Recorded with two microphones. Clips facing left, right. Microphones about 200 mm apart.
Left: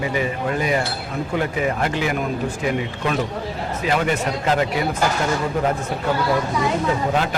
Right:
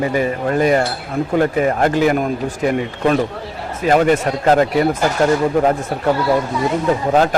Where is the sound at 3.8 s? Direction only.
45° right (ahead or behind).